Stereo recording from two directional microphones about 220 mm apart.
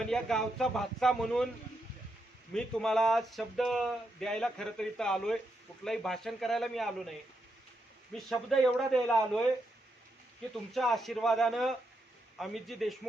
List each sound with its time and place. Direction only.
0.0 s speech: centre (ahead or behind)
2.5 s speech: 5° left (ahead or behind)
8.1 s speech: centre (ahead or behind)
10.7 s speech: centre (ahead or behind)